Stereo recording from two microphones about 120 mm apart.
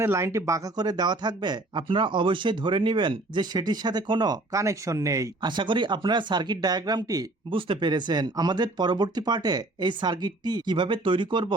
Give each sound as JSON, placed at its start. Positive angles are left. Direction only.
{"t": 0.0, "sound": "speech", "side_deg": -20}
{"t": 5.5, "sound": "speech", "side_deg": -40}
{"t": 7.5, "sound": "speech", "side_deg": -40}